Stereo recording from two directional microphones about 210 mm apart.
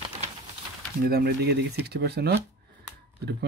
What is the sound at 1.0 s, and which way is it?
Speech, 50° right (ahead or behind).